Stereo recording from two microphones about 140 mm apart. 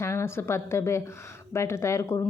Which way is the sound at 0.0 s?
20° left (ahead or behind).